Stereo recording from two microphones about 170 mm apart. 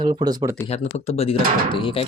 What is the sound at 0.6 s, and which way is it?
Speech, 35° left (ahead or behind).